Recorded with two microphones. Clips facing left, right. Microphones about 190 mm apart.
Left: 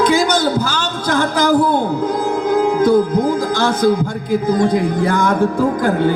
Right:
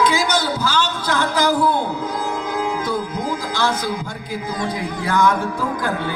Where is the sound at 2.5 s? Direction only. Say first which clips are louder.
Left 12 dB; 55° left (ahead or behind).